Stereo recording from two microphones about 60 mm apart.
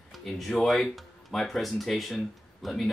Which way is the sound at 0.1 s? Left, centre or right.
Centre.